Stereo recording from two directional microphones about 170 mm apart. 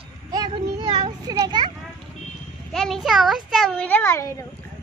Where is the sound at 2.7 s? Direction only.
Centre (ahead or behind); by 4.5 s 15° left (ahead or behind).